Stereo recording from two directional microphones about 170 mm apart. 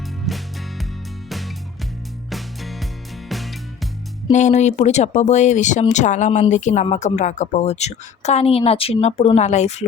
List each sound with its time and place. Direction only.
0.3 s music: centre (ahead or behind)
4.3 s a woman's voice: 45° left (ahead or behind)